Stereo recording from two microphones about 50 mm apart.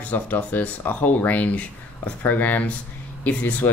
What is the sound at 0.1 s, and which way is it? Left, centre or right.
Speech, left.